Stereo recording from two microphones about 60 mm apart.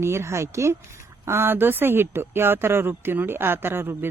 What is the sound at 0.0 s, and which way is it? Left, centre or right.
Speech, right.